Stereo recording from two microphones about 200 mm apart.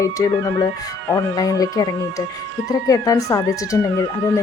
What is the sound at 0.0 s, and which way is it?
Speech, 15° left (ahead or behind).